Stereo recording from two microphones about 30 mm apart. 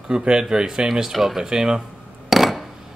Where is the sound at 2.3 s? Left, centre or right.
Centre.